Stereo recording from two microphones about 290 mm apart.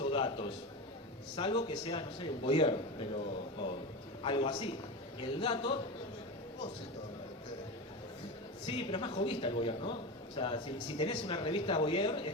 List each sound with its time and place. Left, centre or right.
0.0 s a sound: centre
1.4 s a man's voice: centre
8.6 s a man's voice: centre